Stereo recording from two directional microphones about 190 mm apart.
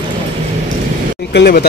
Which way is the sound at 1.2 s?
60° left (ahead or behind).